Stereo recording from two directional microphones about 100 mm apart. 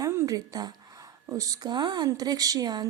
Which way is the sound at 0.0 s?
30° right (ahead or behind).